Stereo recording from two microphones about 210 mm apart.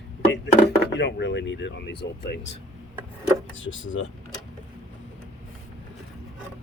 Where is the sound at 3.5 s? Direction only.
65° left (ahead or behind).